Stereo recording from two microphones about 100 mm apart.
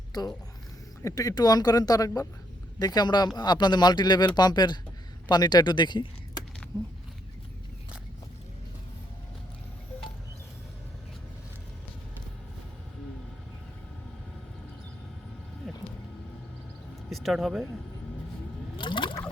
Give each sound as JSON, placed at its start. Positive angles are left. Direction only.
{"t": 0.1, "sound": "speech", "side_deg": 40}
{"t": 15.6, "sound": "vehicle", "side_deg": 0}
{"t": 17.1, "sound": "speech", "side_deg": 0}
{"t": 18.8, "sound": "water", "side_deg": 55}